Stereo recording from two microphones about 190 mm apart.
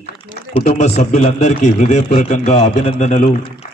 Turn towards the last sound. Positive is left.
turn(degrees=35)  # may be behind; listen again after turning